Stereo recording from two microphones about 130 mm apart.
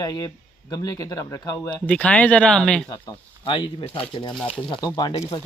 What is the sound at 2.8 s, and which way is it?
Speech, 30° left (ahead or behind).